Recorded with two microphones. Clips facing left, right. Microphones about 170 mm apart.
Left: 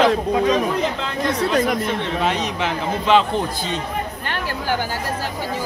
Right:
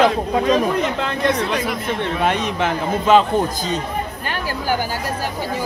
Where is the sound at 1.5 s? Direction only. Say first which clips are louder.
Left 3 dB; 45° left (ahead or behind).